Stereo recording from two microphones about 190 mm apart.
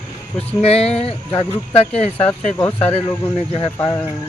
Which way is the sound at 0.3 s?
35° left (ahead or behind).